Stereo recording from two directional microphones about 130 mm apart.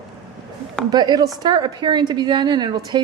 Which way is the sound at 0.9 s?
30° right (ahead or behind).